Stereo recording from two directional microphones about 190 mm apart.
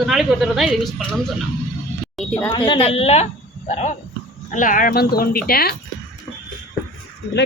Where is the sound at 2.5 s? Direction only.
25° left (ahead or behind); by 5.7 s 55° left (ahead or behind).